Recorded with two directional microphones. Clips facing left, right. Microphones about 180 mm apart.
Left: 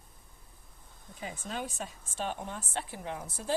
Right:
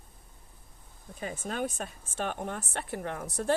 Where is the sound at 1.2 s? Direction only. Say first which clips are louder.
Right 5 dB; 55° right (ahead or behind).